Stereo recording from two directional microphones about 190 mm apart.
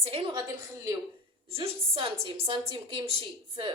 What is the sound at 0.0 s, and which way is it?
Speech, 30° right (ahead or behind).